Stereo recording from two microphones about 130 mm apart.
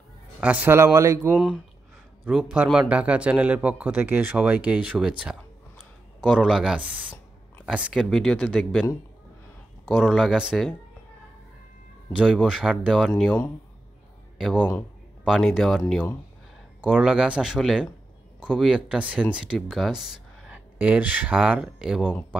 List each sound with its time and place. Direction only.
0.4 s speech: 10° right (ahead or behind)
1.3 s a man's voice: 5° right (ahead or behind)
9.8 s speech: centre (ahead or behind)
12.2 s a man's voice: 5° right (ahead or behind)
14.6 s speech: 10° left (ahead or behind)
15.2 s speech: 5° right (ahead or behind)
16.8 s a man's voice: 10° right (ahead or behind)